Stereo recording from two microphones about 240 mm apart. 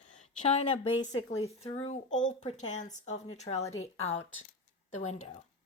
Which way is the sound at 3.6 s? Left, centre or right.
Left.